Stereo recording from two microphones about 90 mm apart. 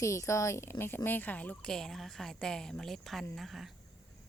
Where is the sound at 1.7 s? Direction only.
5° left (ahead or behind).